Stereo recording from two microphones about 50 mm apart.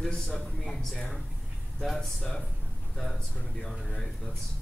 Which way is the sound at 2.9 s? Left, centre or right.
Centre.